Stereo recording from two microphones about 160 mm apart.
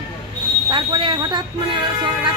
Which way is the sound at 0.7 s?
30° right (ahead or behind).